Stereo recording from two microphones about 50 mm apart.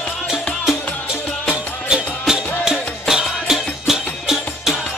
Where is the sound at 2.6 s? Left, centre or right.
Centre.